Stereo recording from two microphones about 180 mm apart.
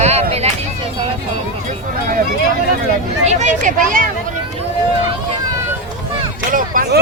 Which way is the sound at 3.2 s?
40° right (ahead or behind).